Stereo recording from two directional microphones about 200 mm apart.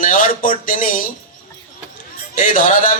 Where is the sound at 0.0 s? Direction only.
45° left (ahead or behind).